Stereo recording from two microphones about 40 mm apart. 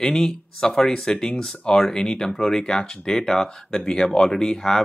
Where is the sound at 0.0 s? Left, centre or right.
Centre.